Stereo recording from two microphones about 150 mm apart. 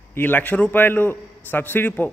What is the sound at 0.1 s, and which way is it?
A man's voice, 15° left (ahead or behind).